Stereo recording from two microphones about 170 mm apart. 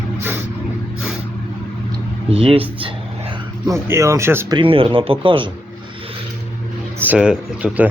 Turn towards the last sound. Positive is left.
turn(degrees=-10)  # may be behind; listen again after turning